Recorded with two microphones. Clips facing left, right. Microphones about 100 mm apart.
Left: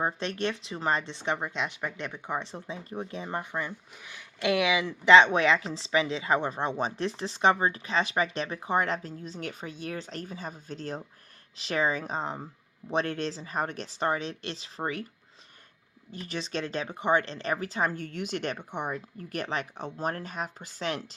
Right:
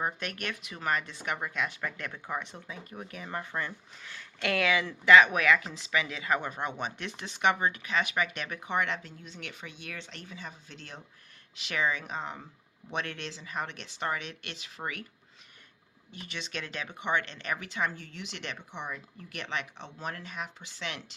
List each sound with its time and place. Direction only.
0.0 s speech: 30° left (ahead or behind)
3.5 s speech: 15° left (ahead or behind); by 15.0 s 35° left (ahead or behind)
16.1 s speech: 35° left (ahead or behind)
17.9 s speech: 50° left (ahead or behind)